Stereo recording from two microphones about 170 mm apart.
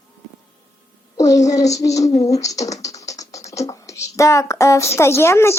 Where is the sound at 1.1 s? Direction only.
20° left (ahead or behind).